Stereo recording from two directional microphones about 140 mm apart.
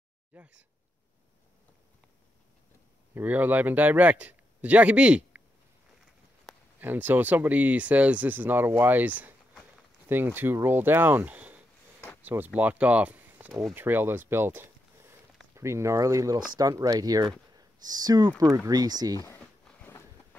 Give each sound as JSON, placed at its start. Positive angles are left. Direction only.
{"t": 0.3, "sound": "speech", "side_deg": -10}
{"t": 3.2, "sound": "speech", "side_deg": -10}
{"t": 6.8, "sound": "speech", "side_deg": -15}
{"t": 19.2, "sound": "a sound", "side_deg": 10}